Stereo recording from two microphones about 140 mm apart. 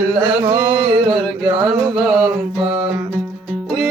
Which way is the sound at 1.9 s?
Centre (ahead or behind).